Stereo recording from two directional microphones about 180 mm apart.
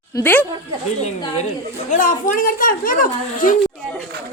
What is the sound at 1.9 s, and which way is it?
Speech, 50° left (ahead or behind).